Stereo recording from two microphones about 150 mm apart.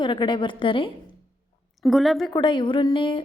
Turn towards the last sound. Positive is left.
turn(degrees=35)  # may be behind; listen again after turning